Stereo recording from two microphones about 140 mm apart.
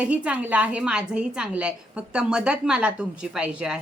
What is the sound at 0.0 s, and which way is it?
A woman's voice, 10° right (ahead or behind).